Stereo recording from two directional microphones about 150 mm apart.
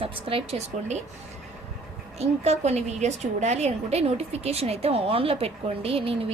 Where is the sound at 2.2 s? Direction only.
45° right (ahead or behind).